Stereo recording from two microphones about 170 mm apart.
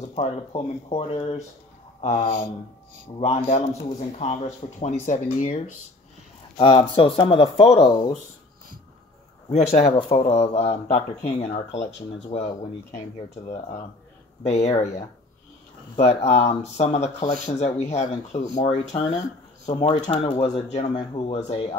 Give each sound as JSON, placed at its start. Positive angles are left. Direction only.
{"t": 0.1, "sound": "speech", "side_deg": 35}
{"t": 6.6, "sound": "speech", "side_deg": 30}
{"t": 7.7, "sound": "speech", "side_deg": 20}
{"t": 9.5, "sound": "speech", "side_deg": 40}
{"t": 14.4, "sound": "speech", "side_deg": 40}